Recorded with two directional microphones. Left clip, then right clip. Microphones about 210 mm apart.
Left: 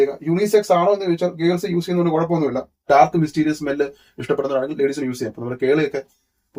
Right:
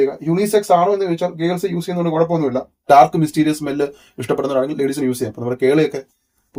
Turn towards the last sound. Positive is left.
turn(degrees=-35)  # may be behind; listen again after turning